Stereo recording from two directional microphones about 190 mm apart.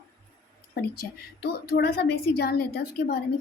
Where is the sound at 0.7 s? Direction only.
55° left (ahead or behind).